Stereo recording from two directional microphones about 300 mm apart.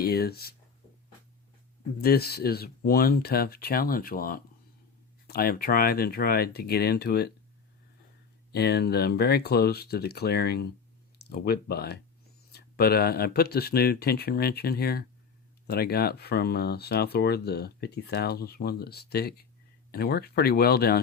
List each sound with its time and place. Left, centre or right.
0.0 s speech: left
2.0 s speech: left
8.5 s speech: left